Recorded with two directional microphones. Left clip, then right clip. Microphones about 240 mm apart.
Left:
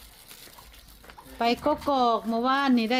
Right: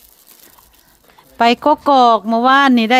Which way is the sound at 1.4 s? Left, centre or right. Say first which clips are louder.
Right 13 dB; right.